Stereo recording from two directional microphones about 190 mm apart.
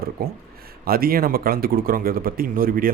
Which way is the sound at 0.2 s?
50° right (ahead or behind).